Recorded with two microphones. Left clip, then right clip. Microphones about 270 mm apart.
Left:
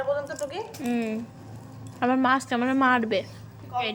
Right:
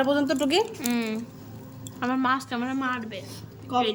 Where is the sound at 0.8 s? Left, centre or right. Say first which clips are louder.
Even; centre.